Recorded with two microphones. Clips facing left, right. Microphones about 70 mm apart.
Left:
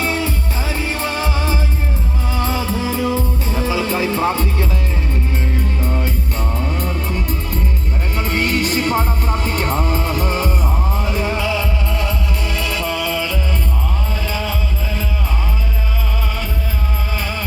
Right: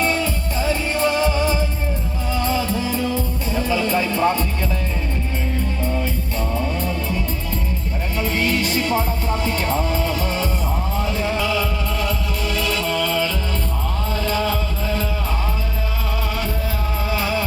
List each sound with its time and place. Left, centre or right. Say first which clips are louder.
0.7 s music: right 3 dB; left
2.9 s music: left 3 dB; left
3.5 s music: even; centre
8.1 s music: left 2 dB; left
11.3 s music: left 1 dB; centre
17.1 s music: right 5 dB; centre